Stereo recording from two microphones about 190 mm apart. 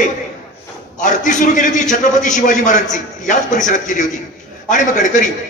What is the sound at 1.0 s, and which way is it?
A man's voice, 40° left (ahead or behind).